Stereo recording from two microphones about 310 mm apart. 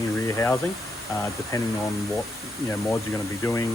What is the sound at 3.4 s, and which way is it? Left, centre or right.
Speech, centre.